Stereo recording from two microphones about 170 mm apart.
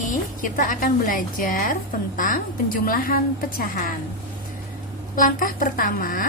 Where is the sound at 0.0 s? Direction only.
50° left (ahead or behind).